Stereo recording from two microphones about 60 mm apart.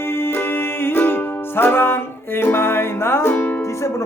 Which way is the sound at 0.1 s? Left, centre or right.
Left.